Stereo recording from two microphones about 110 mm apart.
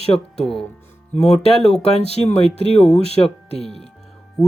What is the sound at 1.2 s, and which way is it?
Speech, 75° left (ahead or behind).